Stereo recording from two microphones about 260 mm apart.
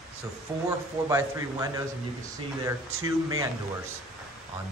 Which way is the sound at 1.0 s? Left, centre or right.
Centre.